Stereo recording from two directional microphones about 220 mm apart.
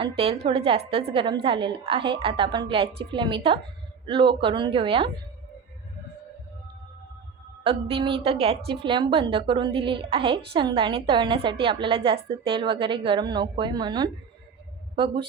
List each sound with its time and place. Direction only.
0.0 s a woman's voice: 25° right (ahead or behind)
7.6 s a woman's voice: 25° right (ahead or behind)